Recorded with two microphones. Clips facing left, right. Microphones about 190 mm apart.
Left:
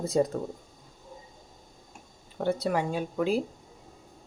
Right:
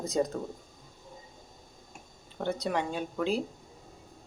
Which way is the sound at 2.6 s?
5° left (ahead or behind).